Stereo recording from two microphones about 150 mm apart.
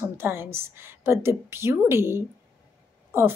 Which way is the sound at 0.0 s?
15° right (ahead or behind).